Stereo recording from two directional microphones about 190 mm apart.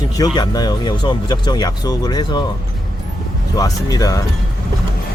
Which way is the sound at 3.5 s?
20° left (ahead or behind).